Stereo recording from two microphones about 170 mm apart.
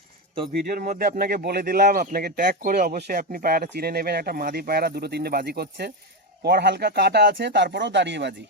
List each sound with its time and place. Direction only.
0.6 s speech: 65° right (ahead or behind); by 8.4 s 90° right